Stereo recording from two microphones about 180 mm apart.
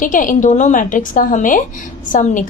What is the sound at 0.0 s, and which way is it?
A woman's voice, 45° left (ahead or behind).